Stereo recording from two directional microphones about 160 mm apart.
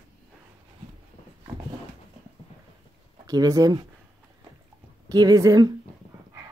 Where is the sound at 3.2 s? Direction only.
20° right (ahead or behind).